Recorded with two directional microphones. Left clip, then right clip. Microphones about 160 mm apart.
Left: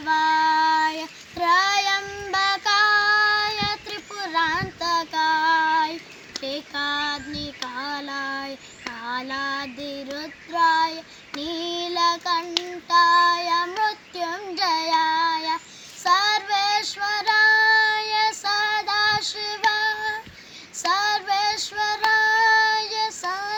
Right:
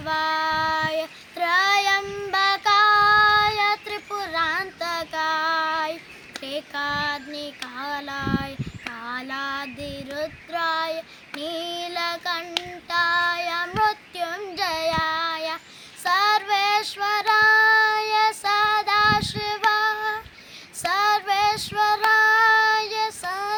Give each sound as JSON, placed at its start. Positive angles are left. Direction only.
{"t": 0.1, "sound": "child singing", "side_deg": -5}
{"t": 7.8, "sound": "child singing", "side_deg": -10}
{"t": 19.5, "sound": "female singing", "side_deg": -10}
{"t": 20.9, "sound": "child singing", "side_deg": -10}